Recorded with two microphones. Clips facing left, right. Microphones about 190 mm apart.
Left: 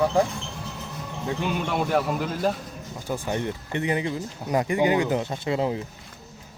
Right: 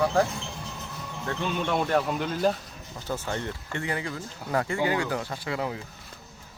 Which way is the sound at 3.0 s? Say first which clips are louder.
Left 4 dB; 15° left (ahead or behind).